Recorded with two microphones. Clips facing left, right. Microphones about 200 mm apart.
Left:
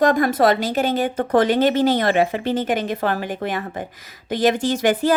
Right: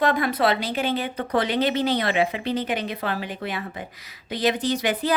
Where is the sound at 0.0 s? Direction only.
45° left (ahead or behind).